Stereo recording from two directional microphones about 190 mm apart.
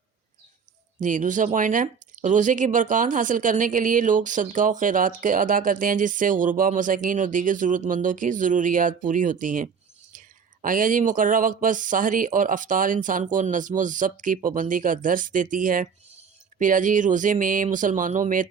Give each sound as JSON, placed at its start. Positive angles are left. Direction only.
{"t": 0.9, "sound": "speech", "side_deg": -40}